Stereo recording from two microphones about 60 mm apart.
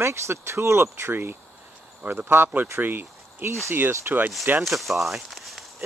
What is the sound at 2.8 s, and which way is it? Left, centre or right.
Speech, right.